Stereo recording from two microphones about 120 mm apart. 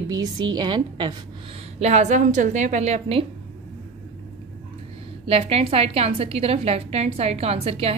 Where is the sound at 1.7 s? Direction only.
70° right (ahead or behind).